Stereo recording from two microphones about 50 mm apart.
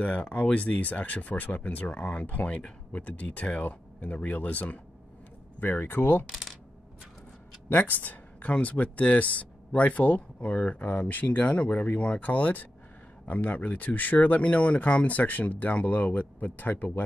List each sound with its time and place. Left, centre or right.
0.0 s speech: left
7.7 s speech: left